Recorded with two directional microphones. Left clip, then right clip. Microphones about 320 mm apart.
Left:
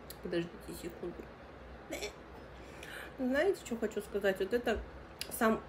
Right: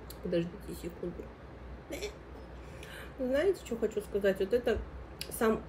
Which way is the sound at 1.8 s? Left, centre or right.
Centre.